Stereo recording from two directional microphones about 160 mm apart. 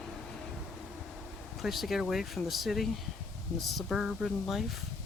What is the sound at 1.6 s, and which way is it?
Speech, centre (ahead or behind).